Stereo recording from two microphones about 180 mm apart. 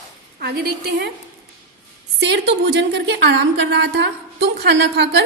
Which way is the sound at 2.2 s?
70° right (ahead or behind).